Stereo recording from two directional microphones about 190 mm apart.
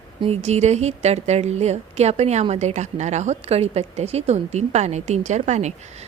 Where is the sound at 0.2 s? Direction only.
35° right (ahead or behind).